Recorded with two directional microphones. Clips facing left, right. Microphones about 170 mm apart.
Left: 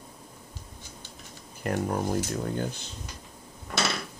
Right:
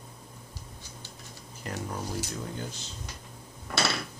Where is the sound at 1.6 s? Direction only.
55° left (ahead or behind).